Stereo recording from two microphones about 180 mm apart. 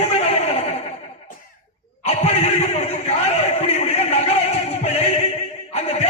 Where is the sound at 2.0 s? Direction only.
35° left (ahead or behind).